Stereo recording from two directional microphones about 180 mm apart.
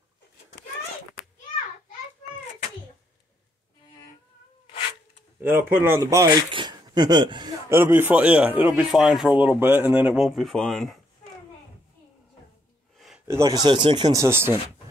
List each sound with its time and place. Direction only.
5.4 s speech: 10° right (ahead or behind)
7.7 s speech: 15° right (ahead or behind)
12.9 s a sound: centre (ahead or behind)
13.3 s speech: 20° right (ahead or behind)